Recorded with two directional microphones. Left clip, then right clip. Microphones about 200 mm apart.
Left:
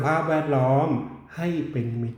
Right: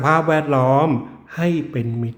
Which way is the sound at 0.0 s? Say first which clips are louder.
Right 6 dB; 20° right (ahead or behind).